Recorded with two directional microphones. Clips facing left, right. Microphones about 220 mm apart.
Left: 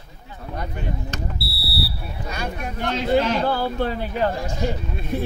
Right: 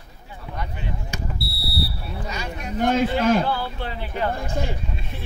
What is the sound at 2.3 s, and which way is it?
Speech, 55° left (ahead or behind).